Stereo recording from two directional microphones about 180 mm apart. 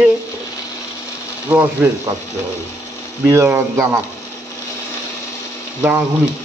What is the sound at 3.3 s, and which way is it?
Speech, 15° right (ahead or behind).